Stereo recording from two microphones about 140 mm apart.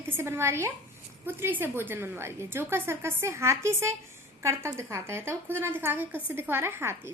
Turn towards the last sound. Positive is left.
turn(degrees=-15)  # may be behind; listen again after turning